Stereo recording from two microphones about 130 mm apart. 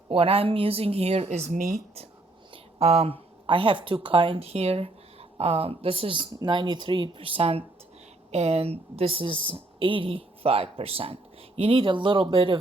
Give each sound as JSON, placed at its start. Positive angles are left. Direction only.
{"t": 0.1, "sound": "speech", "side_deg": -45}
{"t": 2.5, "sound": "a woman's voice", "side_deg": -55}